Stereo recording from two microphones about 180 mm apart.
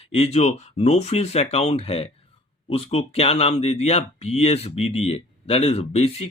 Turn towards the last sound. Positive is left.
turn(degrees=35)  # may be behind; listen again after turning